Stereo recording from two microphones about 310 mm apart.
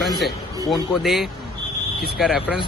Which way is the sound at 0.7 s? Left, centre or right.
Centre.